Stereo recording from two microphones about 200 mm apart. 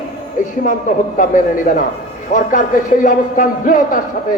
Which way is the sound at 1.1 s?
40° left (ahead or behind).